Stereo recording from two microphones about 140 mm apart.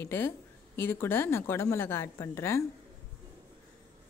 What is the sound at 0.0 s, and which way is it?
Speech, 15° left (ahead or behind).